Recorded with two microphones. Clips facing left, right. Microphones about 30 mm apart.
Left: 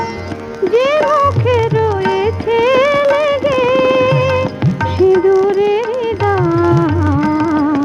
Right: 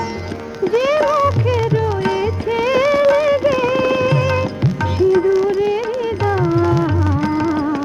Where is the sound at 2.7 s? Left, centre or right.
Centre.